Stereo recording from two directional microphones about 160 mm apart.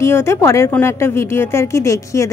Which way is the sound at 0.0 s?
15° left (ahead or behind).